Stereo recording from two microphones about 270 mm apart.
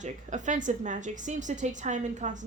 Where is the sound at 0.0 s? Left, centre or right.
Right.